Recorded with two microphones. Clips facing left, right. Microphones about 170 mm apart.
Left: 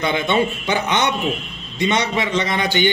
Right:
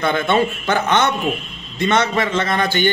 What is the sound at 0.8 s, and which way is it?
Mantra, 15° left (ahead or behind).